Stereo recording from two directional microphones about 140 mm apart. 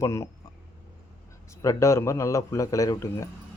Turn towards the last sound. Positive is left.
turn(degrees=20)  # may be behind; listen again after turning